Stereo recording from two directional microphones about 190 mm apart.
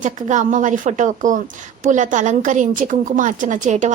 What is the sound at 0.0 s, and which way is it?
A woman's voice, 40° right (ahead or behind).